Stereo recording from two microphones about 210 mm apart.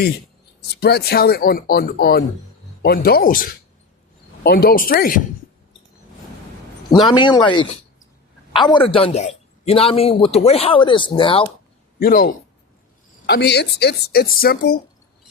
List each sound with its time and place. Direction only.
0.7 s speech: 50° left (ahead or behind)
7.0 s a man's voice: 20° left (ahead or behind)
11.9 s speech: 45° left (ahead or behind)